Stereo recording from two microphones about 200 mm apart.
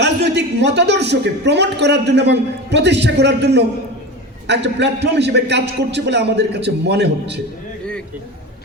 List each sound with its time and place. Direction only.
0.0 s a man's voice: 60° right (ahead or behind)